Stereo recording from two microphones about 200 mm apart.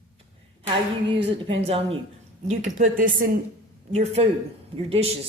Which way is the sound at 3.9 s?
30° right (ahead or behind).